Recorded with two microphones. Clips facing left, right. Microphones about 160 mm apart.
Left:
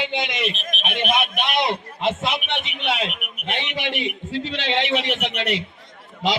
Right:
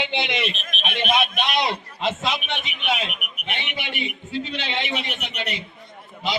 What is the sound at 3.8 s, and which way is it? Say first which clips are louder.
A man's voice: left 4 dB; 90° left.